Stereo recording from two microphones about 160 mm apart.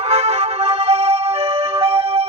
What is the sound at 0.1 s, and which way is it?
Music, 40° right (ahead or behind).